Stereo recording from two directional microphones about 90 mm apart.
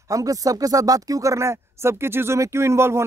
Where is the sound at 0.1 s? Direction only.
40° right (ahead or behind).